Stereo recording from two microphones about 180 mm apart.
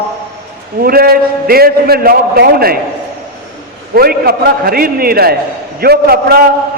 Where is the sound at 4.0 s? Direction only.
60° right (ahead or behind).